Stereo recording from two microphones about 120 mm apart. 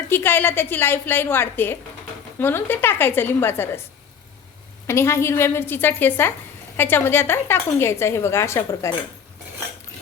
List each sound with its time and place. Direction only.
0.1 s a woman's voice: 15° left (ahead or behind)
4.9 s a woman's voice: 20° left (ahead or behind)